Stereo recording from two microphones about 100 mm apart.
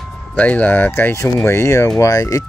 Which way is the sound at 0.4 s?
15° left (ahead or behind).